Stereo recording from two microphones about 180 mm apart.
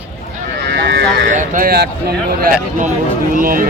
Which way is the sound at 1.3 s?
45° right (ahead or behind).